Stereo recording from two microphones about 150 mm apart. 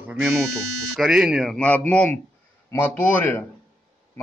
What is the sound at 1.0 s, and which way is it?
A man's voice, 5° right (ahead or behind).